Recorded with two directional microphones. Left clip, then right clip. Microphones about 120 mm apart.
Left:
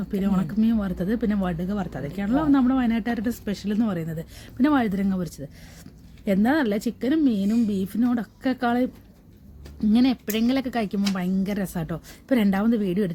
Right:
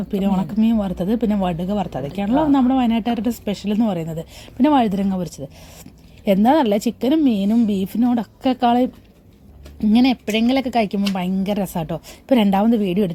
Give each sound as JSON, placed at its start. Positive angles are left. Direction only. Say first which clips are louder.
{"t": 0.1, "sound": "a woman's voice", "louder": "right 5 dB", "side_deg": -10}
{"t": 9.9, "sound": "a woman's voice", "louder": "right 5 dB", "side_deg": -20}